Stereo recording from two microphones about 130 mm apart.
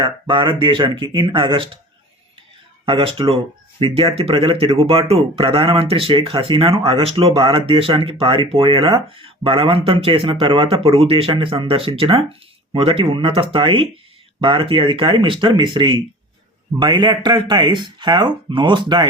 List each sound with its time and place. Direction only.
0.0 s speech: 40° right (ahead or behind)
2.8 s speech: 40° right (ahead or behind)